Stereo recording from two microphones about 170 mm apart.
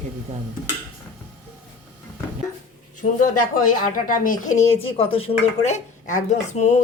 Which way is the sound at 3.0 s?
50° left (ahead or behind).